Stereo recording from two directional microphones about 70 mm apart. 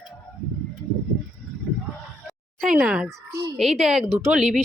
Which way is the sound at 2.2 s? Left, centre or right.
Centre.